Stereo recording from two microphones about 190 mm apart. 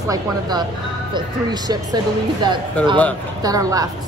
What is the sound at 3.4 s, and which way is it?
Speech, 20° right (ahead or behind).